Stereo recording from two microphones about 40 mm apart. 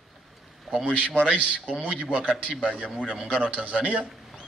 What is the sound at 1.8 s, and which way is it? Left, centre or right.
A man's voice, right.